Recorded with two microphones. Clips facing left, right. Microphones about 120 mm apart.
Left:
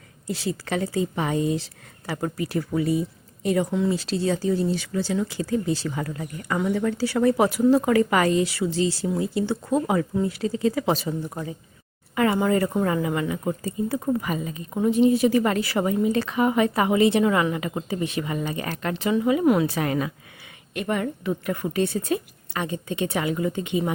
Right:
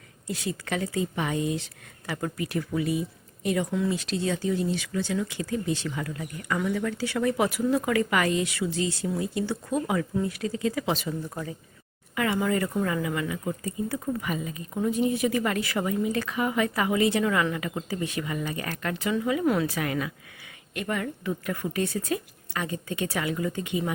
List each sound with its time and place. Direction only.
0.3 s speech: 30° left (ahead or behind)
12.1 s speech: 35° left (ahead or behind)